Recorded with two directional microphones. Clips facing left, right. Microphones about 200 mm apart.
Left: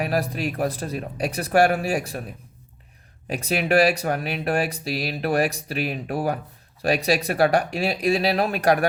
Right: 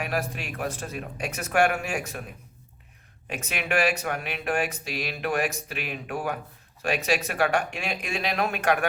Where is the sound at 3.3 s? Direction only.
35° left (ahead or behind).